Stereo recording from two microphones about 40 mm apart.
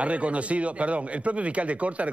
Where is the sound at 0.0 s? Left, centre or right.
Right.